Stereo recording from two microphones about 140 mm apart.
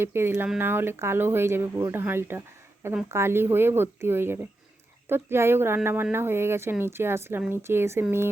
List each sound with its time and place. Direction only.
0.0 s speech: 20° right (ahead or behind)